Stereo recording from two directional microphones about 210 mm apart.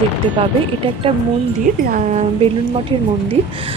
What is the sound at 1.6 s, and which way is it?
Speech, 40° right (ahead or behind).